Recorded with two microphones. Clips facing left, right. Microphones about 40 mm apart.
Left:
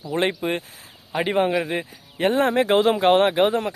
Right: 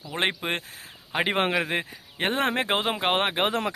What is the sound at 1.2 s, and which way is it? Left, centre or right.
Speech, right.